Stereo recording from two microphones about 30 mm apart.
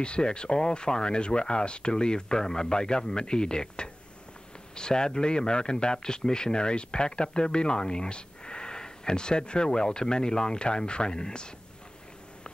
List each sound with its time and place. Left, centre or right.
0.0 s speech: left